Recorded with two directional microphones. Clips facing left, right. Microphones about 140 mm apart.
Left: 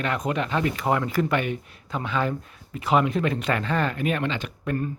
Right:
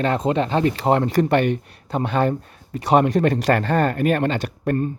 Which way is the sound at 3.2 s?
60° right (ahead or behind).